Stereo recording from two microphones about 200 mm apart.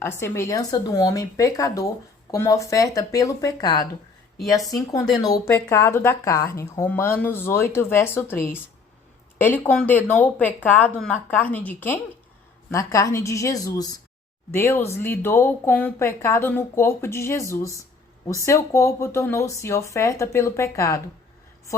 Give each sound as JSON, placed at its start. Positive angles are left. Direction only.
{"t": 0.2, "sound": "speech", "side_deg": 15}